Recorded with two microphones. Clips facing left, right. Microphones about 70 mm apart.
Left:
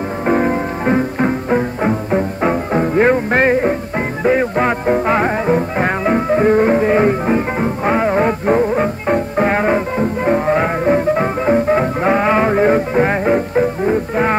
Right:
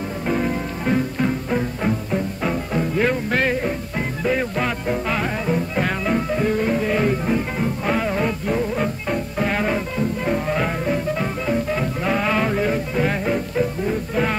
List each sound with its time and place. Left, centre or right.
0.3 s music: left